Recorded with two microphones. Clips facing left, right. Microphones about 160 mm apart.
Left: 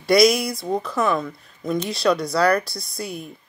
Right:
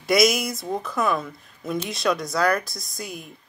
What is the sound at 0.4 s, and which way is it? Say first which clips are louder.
Speech: left 2 dB; 30° left (ahead or behind).